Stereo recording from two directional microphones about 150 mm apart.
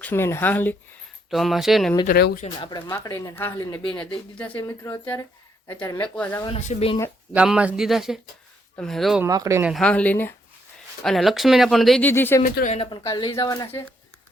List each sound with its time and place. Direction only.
0.0 s speech: 15° left (ahead or behind)
1.3 s speech: centre (ahead or behind)
2.0 s speech: 65° left (ahead or behind)
2.6 s speech: 30° left (ahead or behind)
2.9 s speech: 20° left (ahead or behind)
6.6 s speech: 50° left (ahead or behind)
7.3 s speech: 5° right (ahead or behind)
9.2 s speech: 20° right (ahead or behind)
9.6 s speech: 5° left (ahead or behind)
11.0 s speech: centre (ahead or behind)
12.0 s speech: 15° left (ahead or behind)
12.4 s speech: 65° left (ahead or behind)
12.7 s speech: 40° left (ahead or behind)
13.0 s speech: 25° left (ahead or behind)